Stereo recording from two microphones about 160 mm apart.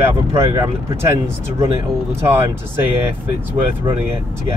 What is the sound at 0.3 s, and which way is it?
Speech, 15° right (ahead or behind).